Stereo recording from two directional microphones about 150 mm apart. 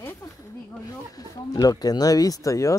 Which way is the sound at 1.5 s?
25° left (ahead or behind).